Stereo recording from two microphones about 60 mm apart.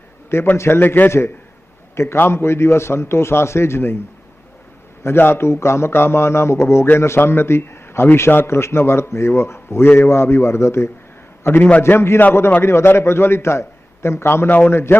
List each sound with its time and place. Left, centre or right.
0.5 s a man's voice: left
0.8 s a man's voice: left
5.0 s a man's voice: left
11.4 s a man's voice: left
11.8 s a man's voice: left
14.4 s a man's voice: left